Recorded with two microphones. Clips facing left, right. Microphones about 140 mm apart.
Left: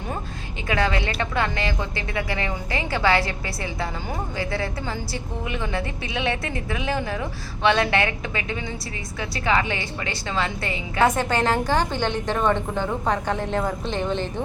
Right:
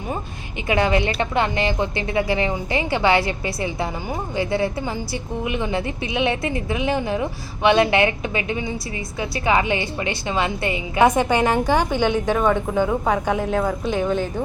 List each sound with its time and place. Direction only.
0.7 s a woman's voice: 20° right (ahead or behind)